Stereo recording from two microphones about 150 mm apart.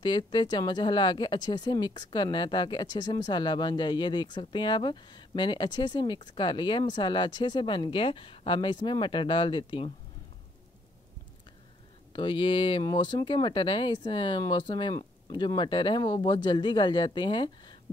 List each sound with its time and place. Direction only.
0.0 s speech: 30° left (ahead or behind)
12.1 s speech: 35° left (ahead or behind)